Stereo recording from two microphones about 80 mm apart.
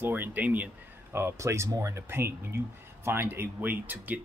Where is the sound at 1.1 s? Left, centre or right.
Right.